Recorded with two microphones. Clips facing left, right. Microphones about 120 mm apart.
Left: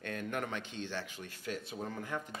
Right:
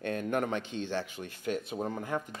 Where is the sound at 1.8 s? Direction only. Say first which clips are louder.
Right 6 dB; 30° right (ahead or behind).